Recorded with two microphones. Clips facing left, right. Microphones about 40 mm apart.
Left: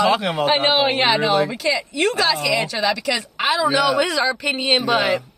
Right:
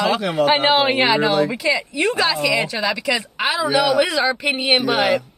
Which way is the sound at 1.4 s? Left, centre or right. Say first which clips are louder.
Right 2 dB; centre.